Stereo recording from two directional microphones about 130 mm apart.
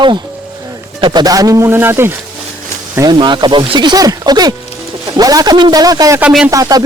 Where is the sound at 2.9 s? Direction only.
30° right (ahead or behind).